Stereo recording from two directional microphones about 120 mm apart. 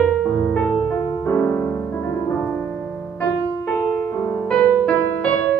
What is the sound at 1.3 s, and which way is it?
Piano, 20° left (ahead or behind).